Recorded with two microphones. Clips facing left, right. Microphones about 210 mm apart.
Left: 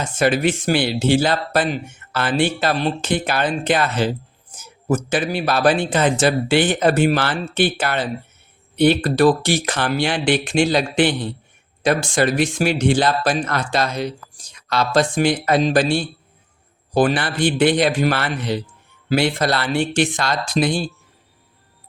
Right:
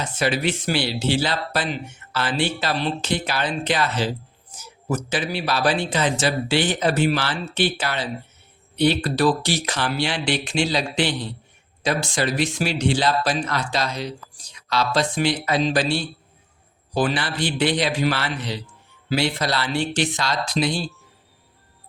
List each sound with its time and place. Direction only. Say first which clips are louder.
0.0 s speech: left 5 dB; 50° left (ahead or behind)